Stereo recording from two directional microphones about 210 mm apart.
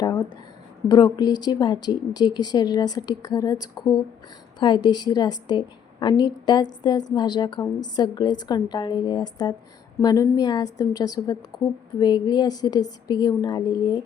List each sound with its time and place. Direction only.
0.9 s a woman's voice: 20° left (ahead or behind)